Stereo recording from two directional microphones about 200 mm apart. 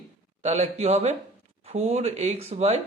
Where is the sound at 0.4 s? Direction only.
35° right (ahead or behind).